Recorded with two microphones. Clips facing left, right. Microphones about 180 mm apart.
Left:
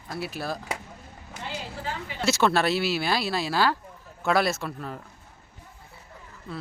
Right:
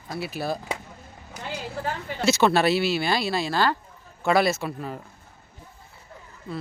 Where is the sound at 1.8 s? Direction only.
50° right (ahead or behind).